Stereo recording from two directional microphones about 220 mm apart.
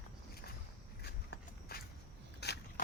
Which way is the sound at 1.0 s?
45° left (ahead or behind).